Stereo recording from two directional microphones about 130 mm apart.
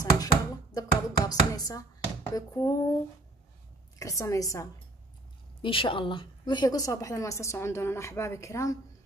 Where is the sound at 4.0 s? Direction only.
25° left (ahead or behind).